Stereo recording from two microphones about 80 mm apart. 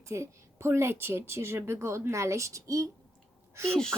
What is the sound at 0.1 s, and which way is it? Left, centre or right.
A woman's voice, right.